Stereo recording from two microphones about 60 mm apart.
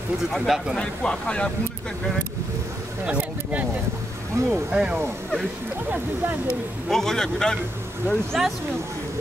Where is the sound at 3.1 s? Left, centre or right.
Right.